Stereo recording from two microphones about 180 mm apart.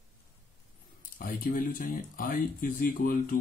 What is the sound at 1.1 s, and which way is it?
Speech, 50° left (ahead or behind).